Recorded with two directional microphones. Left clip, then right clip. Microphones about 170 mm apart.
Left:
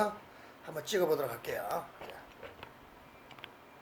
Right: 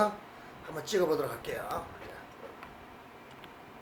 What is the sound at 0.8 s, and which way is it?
Speech, 35° left (ahead or behind).